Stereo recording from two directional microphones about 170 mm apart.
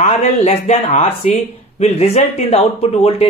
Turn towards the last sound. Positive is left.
turn(degrees=35)  # may be behind; listen again after turning